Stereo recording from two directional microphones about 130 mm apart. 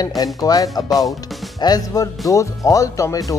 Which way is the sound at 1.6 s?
30° left (ahead or behind).